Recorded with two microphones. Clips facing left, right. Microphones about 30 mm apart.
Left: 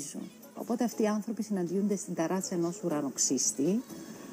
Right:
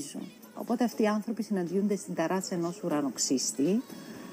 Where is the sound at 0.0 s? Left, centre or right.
Right.